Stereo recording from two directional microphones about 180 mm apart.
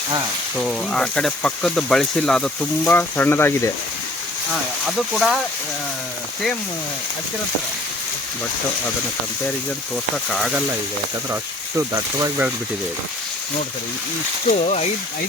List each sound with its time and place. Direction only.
0.5 s speech: 5° left (ahead or behind)
4.9 s speech: centre (ahead or behind)
9.9 s speech: centre (ahead or behind)
11.9 s speech: 15° right (ahead or behind)
14.5 s speech: 40° left (ahead or behind)